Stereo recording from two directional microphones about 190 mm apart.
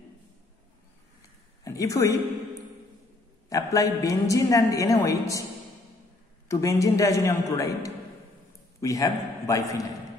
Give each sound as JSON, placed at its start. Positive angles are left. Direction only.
{"t": 1.6, "sound": "speech", "side_deg": 15}
{"t": 3.4, "sound": "a woman's voice", "side_deg": 20}
{"t": 6.5, "sound": "a woman's voice", "side_deg": 15}